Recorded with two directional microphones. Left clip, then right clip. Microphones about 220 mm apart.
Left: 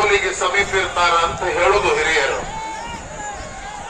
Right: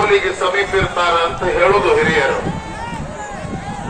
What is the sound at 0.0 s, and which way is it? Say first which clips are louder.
A man's voice: right 2 dB; 45° left (ahead or behind).